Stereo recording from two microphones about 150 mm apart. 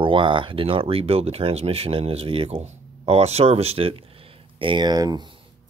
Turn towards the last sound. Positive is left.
turn(degrees=-30)  # may be behind; listen again after turning